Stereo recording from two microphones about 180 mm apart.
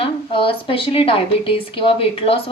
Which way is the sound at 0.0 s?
30° left (ahead or behind).